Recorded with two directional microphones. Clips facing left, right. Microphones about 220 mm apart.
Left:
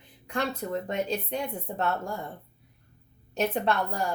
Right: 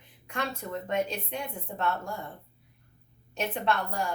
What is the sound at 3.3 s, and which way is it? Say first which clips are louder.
Speech: left 3 dB; 40° left (ahead or behind).